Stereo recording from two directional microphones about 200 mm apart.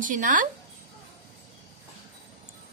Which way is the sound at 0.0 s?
40° right (ahead or behind).